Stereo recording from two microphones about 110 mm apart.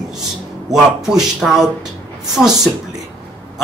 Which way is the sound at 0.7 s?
5° right (ahead or behind).